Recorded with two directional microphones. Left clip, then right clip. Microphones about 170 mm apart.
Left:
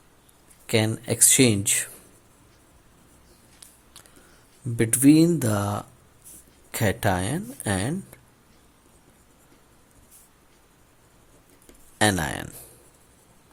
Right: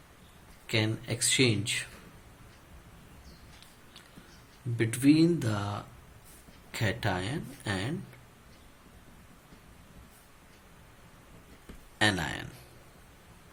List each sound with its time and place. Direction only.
0.7 s speech: 65° left (ahead or behind)
4.8 s speech: 65° left (ahead or behind)
11.9 s speech: 60° left (ahead or behind)